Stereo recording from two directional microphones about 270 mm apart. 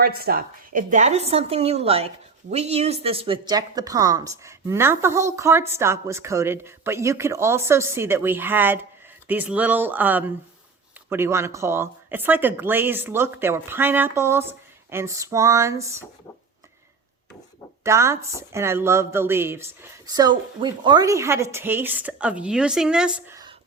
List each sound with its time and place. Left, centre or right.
0.0 s a woman's voice: right; by 16.0 s centre
17.8 s speech: centre